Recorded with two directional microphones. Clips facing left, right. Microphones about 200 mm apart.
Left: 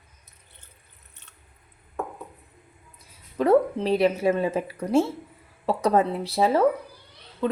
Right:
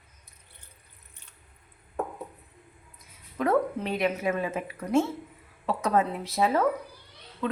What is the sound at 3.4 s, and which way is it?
A woman's voice, 30° left (ahead or behind).